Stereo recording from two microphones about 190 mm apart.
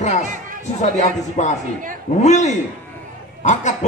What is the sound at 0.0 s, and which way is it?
Chatter, 40° left (ahead or behind).